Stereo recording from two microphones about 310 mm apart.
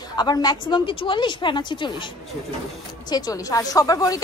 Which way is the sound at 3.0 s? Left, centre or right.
Centre.